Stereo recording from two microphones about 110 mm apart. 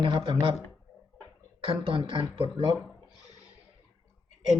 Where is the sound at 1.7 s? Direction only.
50° right (ahead or behind).